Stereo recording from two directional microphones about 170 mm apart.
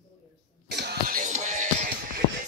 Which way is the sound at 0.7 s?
75° right (ahead or behind).